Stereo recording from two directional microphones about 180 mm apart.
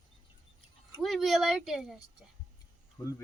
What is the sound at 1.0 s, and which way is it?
Speech, centre (ahead or behind).